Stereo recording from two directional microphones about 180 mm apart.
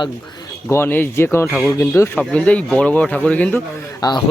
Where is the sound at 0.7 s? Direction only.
10° left (ahead or behind).